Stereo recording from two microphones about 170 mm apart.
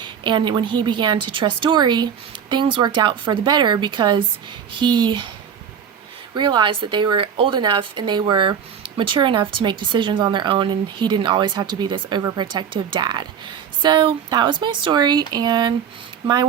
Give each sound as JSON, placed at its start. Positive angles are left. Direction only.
{"t": 0.0, "sound": "speech", "side_deg": -25}
{"t": 6.3, "sound": "speech", "side_deg": -25}